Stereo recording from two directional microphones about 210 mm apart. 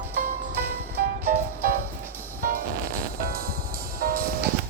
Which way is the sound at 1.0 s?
50° right (ahead or behind).